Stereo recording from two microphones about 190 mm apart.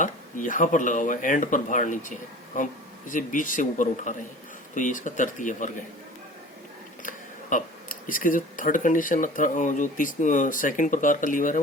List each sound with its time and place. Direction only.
0.0 s speech: 45° left (ahead or behind)
7.5 s speech: 45° left (ahead or behind)